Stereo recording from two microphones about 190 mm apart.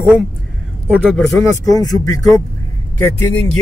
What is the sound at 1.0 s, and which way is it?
Speech, 10° left (ahead or behind).